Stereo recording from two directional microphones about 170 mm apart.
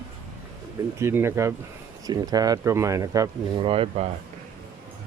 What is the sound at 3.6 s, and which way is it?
Speech, 30° right (ahead or behind).